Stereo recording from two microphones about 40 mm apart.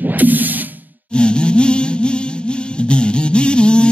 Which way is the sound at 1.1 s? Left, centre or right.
Left.